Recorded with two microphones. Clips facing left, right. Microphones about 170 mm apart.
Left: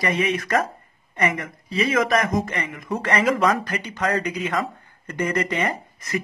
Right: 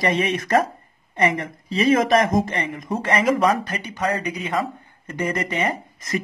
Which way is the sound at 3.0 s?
20° right (ahead or behind).